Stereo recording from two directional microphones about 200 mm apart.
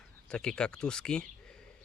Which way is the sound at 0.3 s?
5° left (ahead or behind).